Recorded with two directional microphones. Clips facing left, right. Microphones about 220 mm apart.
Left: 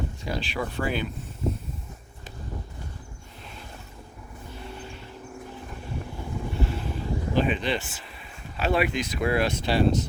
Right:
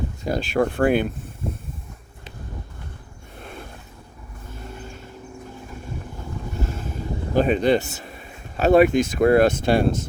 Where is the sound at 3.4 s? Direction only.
55° right (ahead or behind).